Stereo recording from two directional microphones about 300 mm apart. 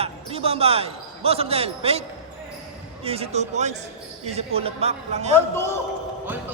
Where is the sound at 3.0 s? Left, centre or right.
Centre.